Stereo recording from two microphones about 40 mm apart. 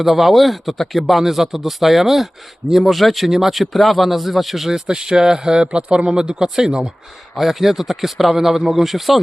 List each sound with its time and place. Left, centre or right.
0.0 s speech: centre
4.9 s speech: centre
7.3 s speech: centre